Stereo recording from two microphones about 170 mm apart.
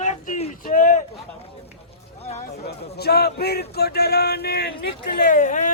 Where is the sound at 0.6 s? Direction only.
50° left (ahead or behind).